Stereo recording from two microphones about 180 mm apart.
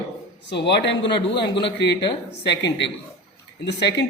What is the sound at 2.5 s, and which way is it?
A man's voice, 75° left (ahead or behind).